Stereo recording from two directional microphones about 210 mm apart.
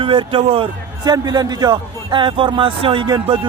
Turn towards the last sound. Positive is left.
turn(degrees=-20)  # may be behind; listen again after turning